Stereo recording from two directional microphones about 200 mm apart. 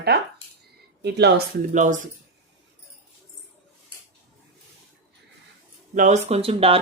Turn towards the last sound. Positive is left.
turn(degrees=-30)  # may be behind; listen again after turning